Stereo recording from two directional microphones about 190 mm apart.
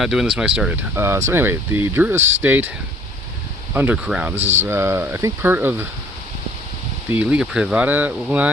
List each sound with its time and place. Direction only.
0.0 s speech: centre (ahead or behind)
3.8 s speech: 10° right (ahead or behind)
4.4 s speech: 35° right (ahead or behind)
4.6 s speech: 15° right (ahead or behind)
7.1 s speech: 10° right (ahead or behind)